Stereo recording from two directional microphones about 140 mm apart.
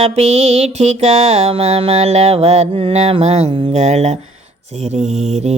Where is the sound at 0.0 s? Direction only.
50° right (ahead or behind).